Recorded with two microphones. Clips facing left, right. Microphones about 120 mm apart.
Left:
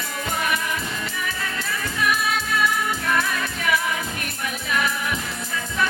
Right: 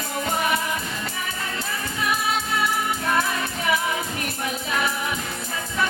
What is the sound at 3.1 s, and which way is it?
Music, 25° right (ahead or behind).